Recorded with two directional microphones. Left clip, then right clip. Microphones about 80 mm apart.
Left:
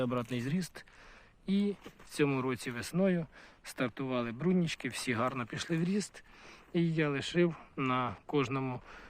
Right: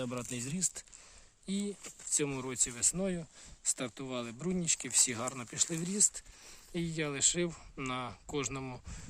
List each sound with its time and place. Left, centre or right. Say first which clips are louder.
0.0 s speech: left 5 dB; centre